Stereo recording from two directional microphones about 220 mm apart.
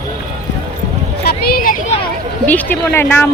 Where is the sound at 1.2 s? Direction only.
45° left (ahead or behind).